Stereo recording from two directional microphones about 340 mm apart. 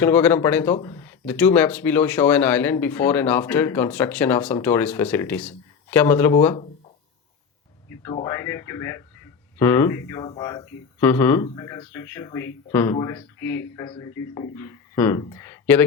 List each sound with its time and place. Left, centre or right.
0.0 s speech: centre
7.9 s speech: centre